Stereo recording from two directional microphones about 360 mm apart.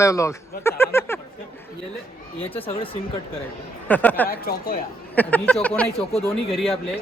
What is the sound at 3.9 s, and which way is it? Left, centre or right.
Speech, centre.